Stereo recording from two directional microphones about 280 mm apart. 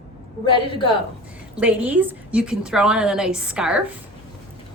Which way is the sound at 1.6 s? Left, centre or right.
Centre.